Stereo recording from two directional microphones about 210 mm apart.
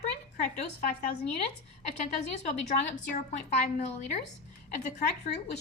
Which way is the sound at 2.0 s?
35° left (ahead or behind).